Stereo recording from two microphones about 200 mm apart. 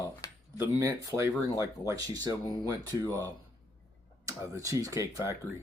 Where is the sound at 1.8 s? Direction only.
20° right (ahead or behind).